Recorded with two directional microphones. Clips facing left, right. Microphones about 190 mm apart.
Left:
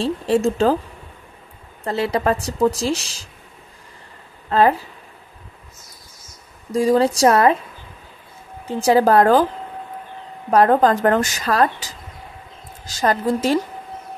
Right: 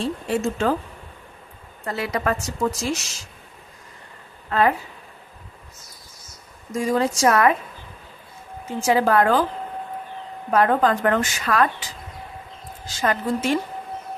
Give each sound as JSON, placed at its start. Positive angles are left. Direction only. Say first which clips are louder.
{"t": 0.0, "sound": "a woman's voice", "louder": "left 5 dB", "side_deg": 30}
{"t": 1.9, "sound": "a woman's voice", "louder": "left 5 dB", "side_deg": 30}
{"t": 4.5, "sound": "a woman's voice", "louder": "left 4 dB", "side_deg": 35}
{"t": 6.7, "sound": "a woman's voice", "louder": "left 5 dB", "side_deg": 35}
{"t": 8.6, "sound": "a woman's voice", "louder": "left 4 dB", "side_deg": 35}
{"t": 10.5, "sound": "a woman's voice", "louder": "left 4 dB", "side_deg": 35}